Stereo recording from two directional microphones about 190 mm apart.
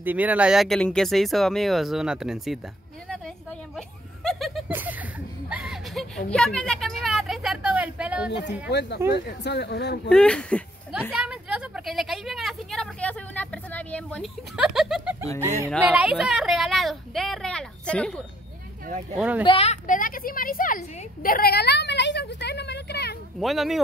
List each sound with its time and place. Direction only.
0.0 s speech: 10° right (ahead or behind)
3.7 s chuckle: centre (ahead or behind)
5.5 s a sound: 5° right (ahead or behind)
8.3 s a woman's voice: 60° left (ahead or behind)
10.0 s speech: 5° left (ahead or behind)
11.1 s speech: 5° right (ahead or behind)
15.4 s speech: 15° right (ahead or behind); by 18.2 s 5° left (ahead or behind)
19.1 s speech: 5° right (ahead or behind)
19.4 s a woman's voice: 30° left (ahead or behind); by 23.1 s 60° left (ahead or behind)
23.4 s speech: centre (ahead or behind)